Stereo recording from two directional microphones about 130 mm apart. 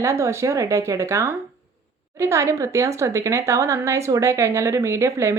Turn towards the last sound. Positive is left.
turn(degrees=-20)  # may be behind; listen again after turning